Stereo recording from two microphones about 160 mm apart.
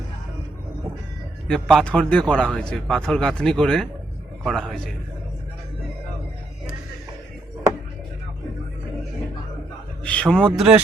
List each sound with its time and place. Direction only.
1.5 s speech: 5° left (ahead or behind)
10.0 s speech: 5° left (ahead or behind)